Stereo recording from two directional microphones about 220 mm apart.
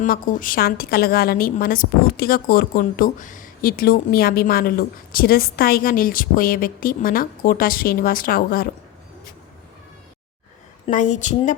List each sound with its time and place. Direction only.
0.0 s a woman's voice: 35° left (ahead or behind)
10.8 s a woman's voice: 35° left (ahead or behind)